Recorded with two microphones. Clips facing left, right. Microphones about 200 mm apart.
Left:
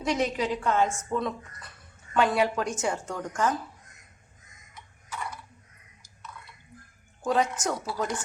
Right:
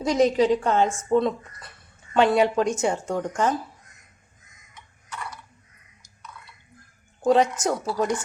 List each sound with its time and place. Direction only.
0.0 s a woman's voice: 35° right (ahead or behind)
7.2 s a woman's voice: 25° right (ahead or behind)